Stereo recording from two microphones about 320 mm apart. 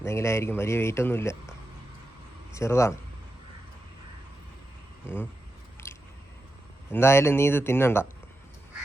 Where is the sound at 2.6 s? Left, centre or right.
Centre.